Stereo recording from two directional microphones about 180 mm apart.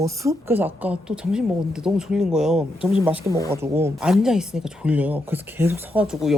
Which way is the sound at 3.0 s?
15° right (ahead or behind).